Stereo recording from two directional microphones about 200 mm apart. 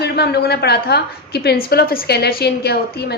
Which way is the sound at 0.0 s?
55° left (ahead or behind).